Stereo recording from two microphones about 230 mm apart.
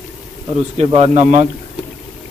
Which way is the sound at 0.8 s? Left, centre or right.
Right.